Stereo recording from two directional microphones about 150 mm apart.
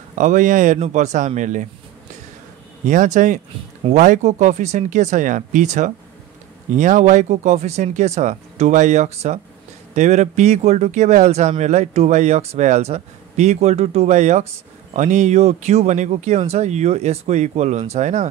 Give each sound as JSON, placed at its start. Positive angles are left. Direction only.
{"t": 0.1, "sound": "speech", "side_deg": -60}
{"t": 0.7, "sound": "speech", "side_deg": -50}
{"t": 2.9, "sound": "speech", "side_deg": -55}